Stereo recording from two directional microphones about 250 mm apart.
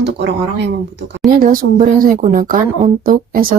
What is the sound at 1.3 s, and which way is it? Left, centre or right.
Speech, right.